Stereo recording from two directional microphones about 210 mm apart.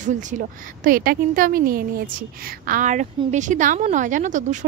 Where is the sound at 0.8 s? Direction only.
45° right (ahead or behind).